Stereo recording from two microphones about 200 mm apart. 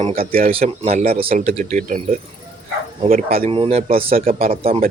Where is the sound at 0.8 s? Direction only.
30° right (ahead or behind); by 3.4 s 45° right (ahead or behind).